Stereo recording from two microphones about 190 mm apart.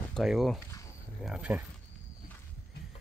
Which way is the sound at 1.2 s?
5° right (ahead or behind).